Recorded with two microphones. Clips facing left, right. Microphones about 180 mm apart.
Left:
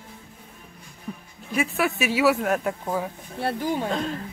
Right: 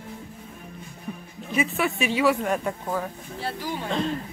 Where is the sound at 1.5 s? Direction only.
Centre (ahead or behind).